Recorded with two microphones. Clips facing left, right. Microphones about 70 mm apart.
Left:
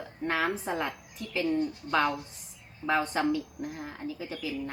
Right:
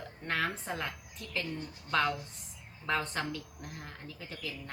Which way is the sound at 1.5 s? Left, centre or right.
Left.